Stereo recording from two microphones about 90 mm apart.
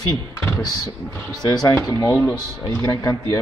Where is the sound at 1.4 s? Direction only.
45° left (ahead or behind).